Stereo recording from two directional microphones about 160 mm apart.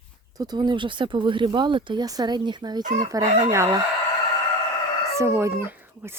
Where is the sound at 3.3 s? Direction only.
45° right (ahead or behind).